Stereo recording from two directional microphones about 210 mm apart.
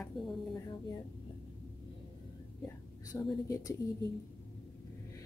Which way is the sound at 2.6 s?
15° left (ahead or behind).